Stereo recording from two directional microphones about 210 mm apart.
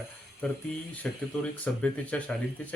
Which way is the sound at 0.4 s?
5° left (ahead or behind).